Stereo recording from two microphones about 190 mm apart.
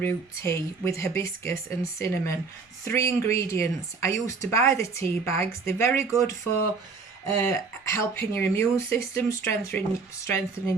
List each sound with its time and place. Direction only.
0.0 s speech: 15° left (ahead or behind)
7.4 s speech: 15° left (ahead or behind)